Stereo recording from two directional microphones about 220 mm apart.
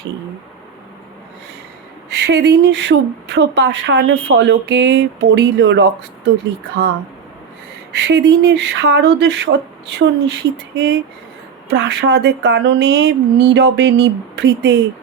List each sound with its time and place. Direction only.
2.0 s speech: 50° right (ahead or behind)
7.9 s speech: 55° right (ahead or behind)